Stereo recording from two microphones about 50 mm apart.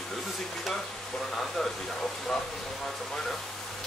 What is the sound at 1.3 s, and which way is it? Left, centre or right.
Speech, centre.